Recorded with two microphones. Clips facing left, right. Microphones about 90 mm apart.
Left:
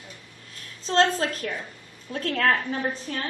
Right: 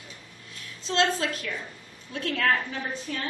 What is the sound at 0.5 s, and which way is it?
A woman's voice, 40° left (ahead or behind).